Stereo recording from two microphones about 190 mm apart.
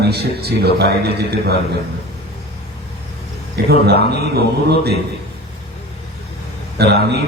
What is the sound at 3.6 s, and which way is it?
A man's voice, 55° right (ahead or behind).